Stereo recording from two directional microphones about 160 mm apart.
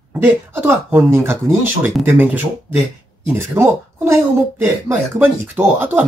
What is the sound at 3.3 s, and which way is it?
Speech, 15° right (ahead or behind).